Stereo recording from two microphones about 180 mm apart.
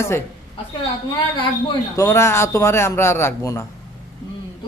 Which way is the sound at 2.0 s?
15° left (ahead or behind).